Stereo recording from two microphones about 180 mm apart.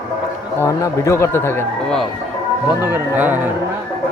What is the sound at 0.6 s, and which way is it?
Speech, 15° left (ahead or behind).